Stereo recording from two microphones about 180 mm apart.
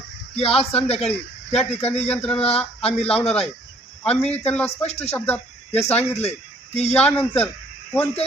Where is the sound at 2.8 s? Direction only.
35° left (ahead or behind).